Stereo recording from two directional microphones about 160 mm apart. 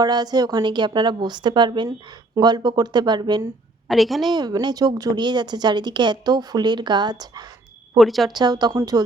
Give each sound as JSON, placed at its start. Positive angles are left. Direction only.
{"t": 0.0, "sound": "speech", "side_deg": -25}
{"t": 3.8, "sound": "a woman's voice", "side_deg": 0}
{"t": 4.3, "sound": "speech", "side_deg": -25}
{"t": 7.9, "sound": "a woman's voice", "side_deg": 0}
{"t": 8.3, "sound": "speech", "side_deg": -25}